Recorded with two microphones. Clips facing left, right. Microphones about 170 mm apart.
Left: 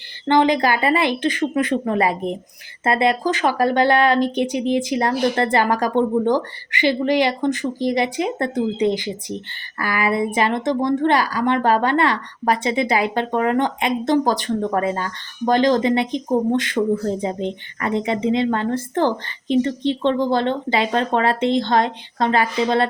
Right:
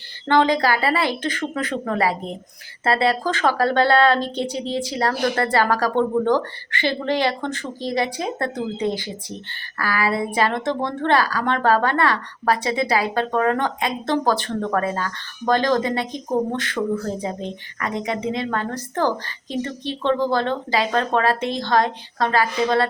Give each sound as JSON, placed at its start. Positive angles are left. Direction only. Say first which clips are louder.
{"t": 0.3, "sound": "speech", "louder": "left 2 dB", "side_deg": 15}